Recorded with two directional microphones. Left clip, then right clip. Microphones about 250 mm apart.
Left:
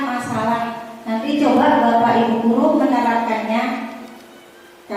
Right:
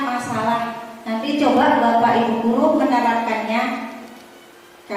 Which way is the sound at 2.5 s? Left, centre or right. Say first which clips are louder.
Even; left.